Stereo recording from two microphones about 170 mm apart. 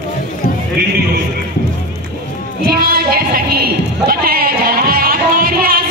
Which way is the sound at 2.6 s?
65° right (ahead or behind).